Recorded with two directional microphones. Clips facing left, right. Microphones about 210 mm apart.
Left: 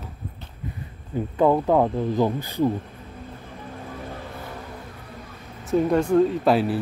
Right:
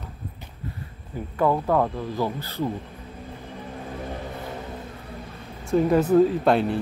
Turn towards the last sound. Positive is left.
turn(degrees=5)  # may be behind; listen again after turning